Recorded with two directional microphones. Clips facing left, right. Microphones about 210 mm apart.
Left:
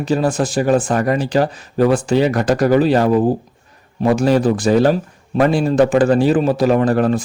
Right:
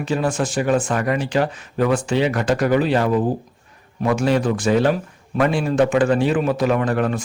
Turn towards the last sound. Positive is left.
turn(degrees=35)  # may be behind; listen again after turning